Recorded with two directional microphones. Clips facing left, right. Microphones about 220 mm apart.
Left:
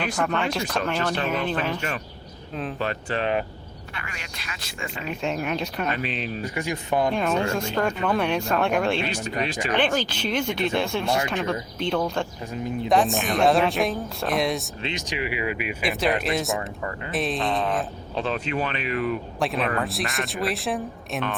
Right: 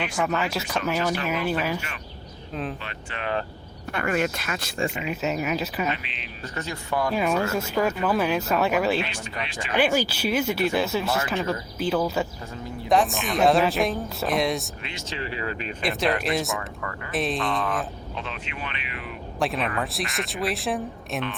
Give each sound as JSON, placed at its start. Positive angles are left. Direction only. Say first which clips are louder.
{"t": 0.0, "sound": "a woman's voice", "louder": "left 1 dB", "side_deg": -5}
{"t": 2.7, "sound": "speech", "louder": "left 10 dB", "side_deg": 40}
{"t": 3.9, "sound": "speech", "louder": "right 16 dB", "side_deg": -50}
{"t": 4.9, "sound": "a woman's voice", "louder": "right 1 dB", "side_deg": -5}
{"t": 6.0, "sound": "speech", "louder": "left 13 dB", "side_deg": 40}
{"t": 6.4, "sound": "speech", "louder": "left 4 dB", "side_deg": 10}
{"t": 7.1, "sound": "a woman's voice", "louder": "even", "side_deg": -5}
{"t": 9.0, "sound": "speech", "louder": "left 7 dB", "side_deg": 40}
{"t": 9.7, "sound": "a woman's voice", "louder": "right 3 dB", "side_deg": -10}
{"t": 14.8, "sound": "speech", "louder": "left 5 dB", "side_deg": 20}
{"t": 15.8, "sound": "a woman's voice", "louder": "even", "side_deg": 0}
{"t": 17.4, "sound": "speech", "louder": "left 2 dB", "side_deg": 25}
{"t": 19.4, "sound": "a woman's voice", "louder": "right 1 dB", "side_deg": 0}